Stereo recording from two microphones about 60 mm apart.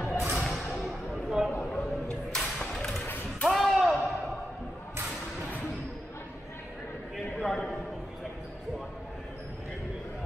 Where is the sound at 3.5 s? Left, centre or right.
Centre.